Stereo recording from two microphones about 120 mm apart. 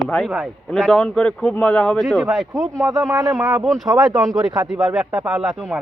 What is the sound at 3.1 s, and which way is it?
Speech, 20° right (ahead or behind).